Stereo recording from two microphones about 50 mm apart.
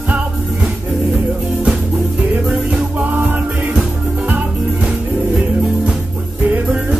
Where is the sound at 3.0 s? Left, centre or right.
Right.